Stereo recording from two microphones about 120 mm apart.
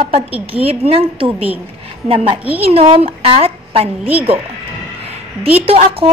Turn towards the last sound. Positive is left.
turn(degrees=-50)  # may be behind; listen again after turning